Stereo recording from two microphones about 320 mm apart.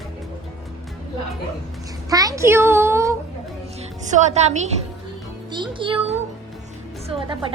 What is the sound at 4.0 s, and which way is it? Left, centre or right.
Speech, right.